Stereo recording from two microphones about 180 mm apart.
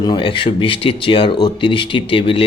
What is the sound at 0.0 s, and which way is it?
Speech, 25° left (ahead or behind).